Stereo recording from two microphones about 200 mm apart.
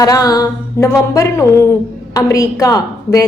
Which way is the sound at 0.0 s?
15° left (ahead or behind).